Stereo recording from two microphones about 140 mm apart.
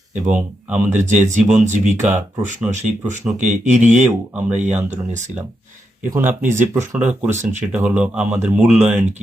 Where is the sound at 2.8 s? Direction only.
60° right (ahead or behind).